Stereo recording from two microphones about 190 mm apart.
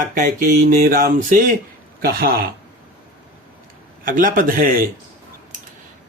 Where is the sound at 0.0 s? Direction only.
45° right (ahead or behind).